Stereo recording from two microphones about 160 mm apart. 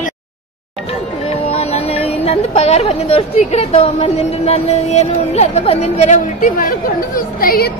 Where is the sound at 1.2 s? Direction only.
40° left (ahead or behind); by 6.7 s 55° left (ahead or behind).